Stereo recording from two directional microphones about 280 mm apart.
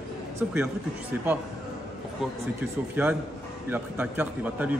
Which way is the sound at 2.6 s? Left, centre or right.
Centre.